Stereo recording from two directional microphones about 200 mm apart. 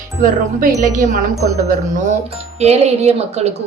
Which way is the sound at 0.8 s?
40° right (ahead or behind).